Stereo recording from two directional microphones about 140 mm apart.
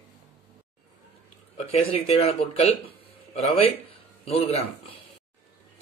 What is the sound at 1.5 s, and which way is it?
Speech, 45° left (ahead or behind).